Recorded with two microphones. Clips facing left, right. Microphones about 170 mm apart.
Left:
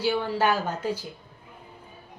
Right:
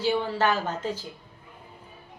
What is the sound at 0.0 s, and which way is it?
Speech, 10° left (ahead or behind).